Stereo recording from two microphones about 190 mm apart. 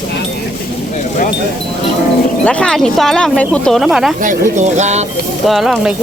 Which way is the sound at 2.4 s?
5° left (ahead or behind).